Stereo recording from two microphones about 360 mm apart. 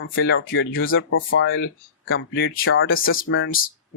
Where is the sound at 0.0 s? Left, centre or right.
Left.